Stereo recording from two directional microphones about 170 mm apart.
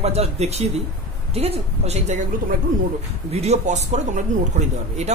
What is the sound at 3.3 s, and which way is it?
Speech, 40° right (ahead or behind).